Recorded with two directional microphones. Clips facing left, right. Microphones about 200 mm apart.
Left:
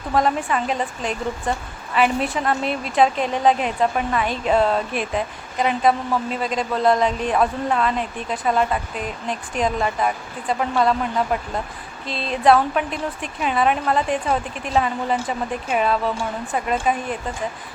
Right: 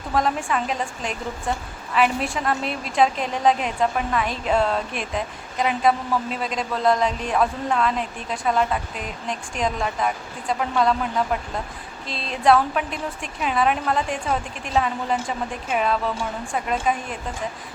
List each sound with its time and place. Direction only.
0.1 s a woman's voice: centre (ahead or behind)